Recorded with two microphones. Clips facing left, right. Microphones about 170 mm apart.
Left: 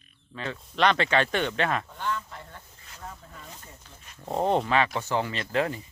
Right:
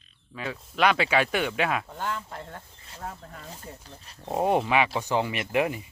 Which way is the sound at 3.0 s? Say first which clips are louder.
Right 4 dB; 50° right (ahead or behind).